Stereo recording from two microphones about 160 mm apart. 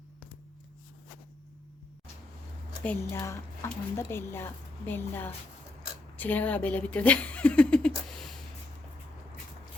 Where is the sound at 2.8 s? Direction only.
15° left (ahead or behind).